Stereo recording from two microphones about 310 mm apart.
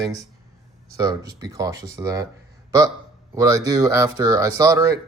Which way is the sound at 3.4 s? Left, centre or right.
Centre.